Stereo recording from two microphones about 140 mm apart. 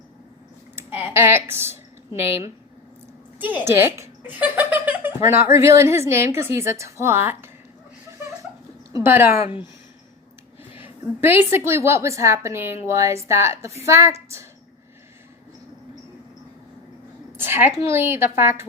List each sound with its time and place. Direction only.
0.8 s speech: 15° right (ahead or behind)
3.3 s giggle: 10° right (ahead or behind)
5.2 s a woman's voice: 20° right (ahead or behind)
8.9 s speech: 20° right (ahead or behind)
10.8 s a woman's voice: 15° right (ahead or behind)
17.3 s a sound: 15° right (ahead or behind)
17.8 s a woman's voice: 15° right (ahead or behind)